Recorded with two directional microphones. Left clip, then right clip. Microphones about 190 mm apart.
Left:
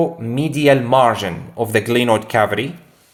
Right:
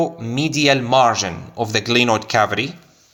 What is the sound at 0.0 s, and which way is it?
Speech, 15° right (ahead or behind).